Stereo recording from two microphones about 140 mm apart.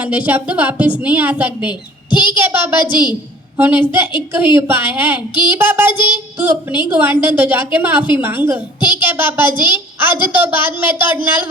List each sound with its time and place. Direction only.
0.0 s a woman's voice: 10° right (ahead or behind)
2.0 s a child's voice: 35° left (ahead or behind)
2.4 s a woman's voice: 15° right (ahead or behind)
2.8 s a woman's voice: 35° left (ahead or behind)
3.6 s a woman's voice: 15° right (ahead or behind)